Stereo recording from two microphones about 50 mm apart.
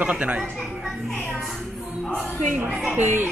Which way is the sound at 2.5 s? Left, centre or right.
Right.